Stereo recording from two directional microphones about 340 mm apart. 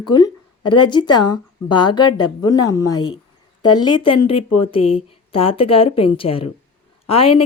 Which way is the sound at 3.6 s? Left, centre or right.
Left.